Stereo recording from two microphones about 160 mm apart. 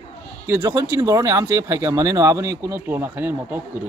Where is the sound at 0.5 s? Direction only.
20° right (ahead or behind).